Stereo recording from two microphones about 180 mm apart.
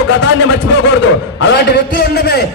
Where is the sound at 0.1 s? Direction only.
90° left.